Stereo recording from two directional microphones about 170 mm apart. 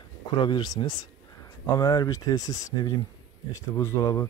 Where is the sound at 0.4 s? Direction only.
25° left (ahead or behind).